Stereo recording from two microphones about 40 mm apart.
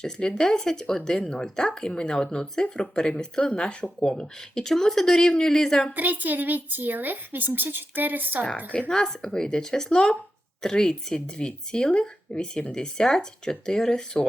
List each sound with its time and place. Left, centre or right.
0.0 s speech: centre
4.2 s speech: centre
6.0 s speech: right
8.9 s speech: centre